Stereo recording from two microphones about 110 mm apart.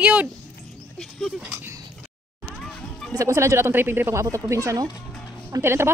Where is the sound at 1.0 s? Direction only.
Centre (ahead or behind).